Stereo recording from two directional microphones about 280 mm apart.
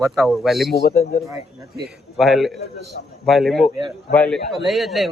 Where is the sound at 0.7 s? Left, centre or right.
Left.